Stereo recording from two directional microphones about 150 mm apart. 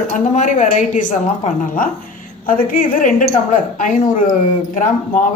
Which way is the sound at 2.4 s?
65° left (ahead or behind).